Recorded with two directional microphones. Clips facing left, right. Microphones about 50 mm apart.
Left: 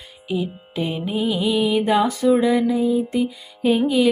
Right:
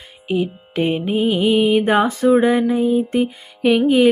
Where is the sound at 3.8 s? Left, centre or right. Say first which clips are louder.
Right 6 dB; right.